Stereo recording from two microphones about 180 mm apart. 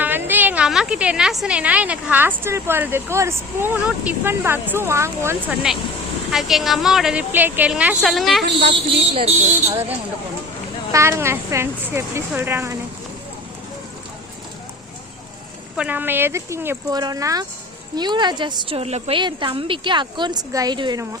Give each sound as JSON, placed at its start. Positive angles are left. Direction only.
{"t": 0.0, "sound": "a woman's voice", "side_deg": -10}
{"t": 6.3, "sound": "a woman's voice", "side_deg": 0}
{"t": 8.4, "sound": "a woman's voice", "side_deg": -70}
{"t": 9.1, "sound": "speech", "side_deg": -35}
{"t": 10.9, "sound": "a woman's voice", "side_deg": -15}
{"t": 15.7, "sound": "a woman's voice", "side_deg": -5}